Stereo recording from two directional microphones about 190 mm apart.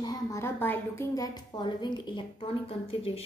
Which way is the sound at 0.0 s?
15° left (ahead or behind).